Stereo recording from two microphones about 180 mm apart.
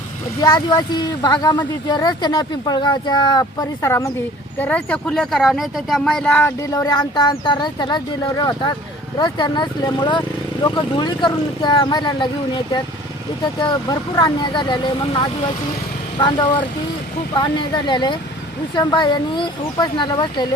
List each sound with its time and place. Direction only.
0.4 s speech: 20° left (ahead or behind); by 6.5 s 5° left (ahead or behind)
6.6 s speech: 20° left (ahead or behind)
14.2 s speech: 25° left (ahead or behind)